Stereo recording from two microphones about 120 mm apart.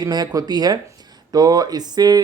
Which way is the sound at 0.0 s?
35° right (ahead or behind).